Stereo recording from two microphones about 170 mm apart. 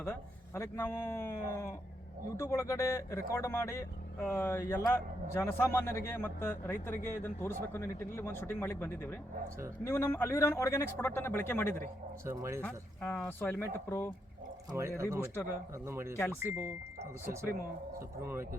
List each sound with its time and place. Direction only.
0.0 s speech: 15° left (ahead or behind)
12.2 s speech: 15° right (ahead or behind)
12.6 s speech: 10° left (ahead or behind)
14.7 s speech: 15° right (ahead or behind)
16.1 s speech: 15° left (ahead or behind)
16.4 s speech: 10° right (ahead or behind)
18.2 s speech: 15° right (ahead or behind)